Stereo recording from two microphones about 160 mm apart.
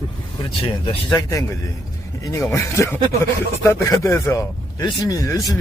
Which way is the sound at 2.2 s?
20° left (ahead or behind).